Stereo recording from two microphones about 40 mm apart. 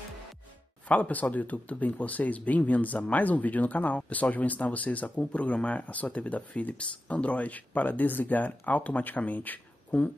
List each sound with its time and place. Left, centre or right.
0.8 s speech: left